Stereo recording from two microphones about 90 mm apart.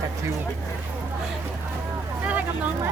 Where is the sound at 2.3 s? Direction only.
15° right (ahead or behind).